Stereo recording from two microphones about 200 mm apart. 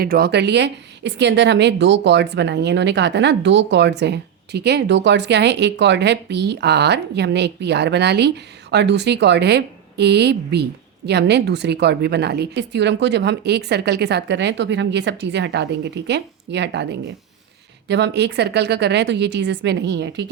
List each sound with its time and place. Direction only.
0.0 s a woman's voice: 50° right (ahead or behind)